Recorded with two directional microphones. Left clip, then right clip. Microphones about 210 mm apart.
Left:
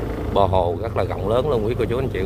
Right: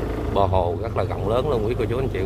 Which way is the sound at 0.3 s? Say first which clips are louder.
Left 3 dB; 15° left (ahead or behind).